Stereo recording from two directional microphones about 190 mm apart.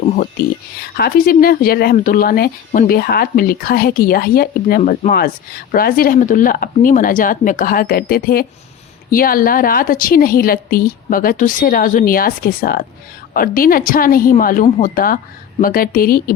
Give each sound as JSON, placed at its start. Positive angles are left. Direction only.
{"t": 0.9, "sound": "speech", "side_deg": 55}